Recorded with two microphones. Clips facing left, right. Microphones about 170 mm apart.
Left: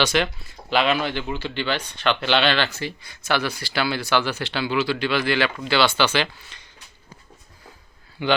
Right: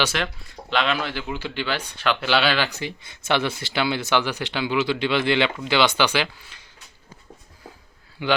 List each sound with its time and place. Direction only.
0.1 s speech: centre (ahead or behind)
2.6 s speech: 15° right (ahead or behind)
8.2 s speech: 5° right (ahead or behind)